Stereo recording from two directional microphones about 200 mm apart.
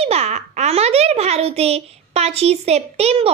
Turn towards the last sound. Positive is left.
turn(degrees=-30)  # may be behind; listen again after turning